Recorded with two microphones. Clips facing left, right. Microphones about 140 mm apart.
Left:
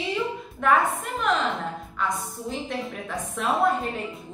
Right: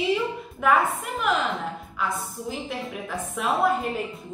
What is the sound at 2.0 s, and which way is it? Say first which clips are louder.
A woman's voice: even; 5° right (ahead or behind).